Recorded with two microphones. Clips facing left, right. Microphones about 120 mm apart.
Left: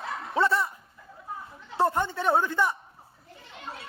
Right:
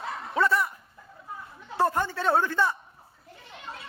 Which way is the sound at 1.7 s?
20° left (ahead or behind).